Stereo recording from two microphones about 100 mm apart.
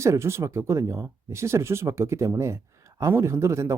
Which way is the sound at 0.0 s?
30° right (ahead or behind).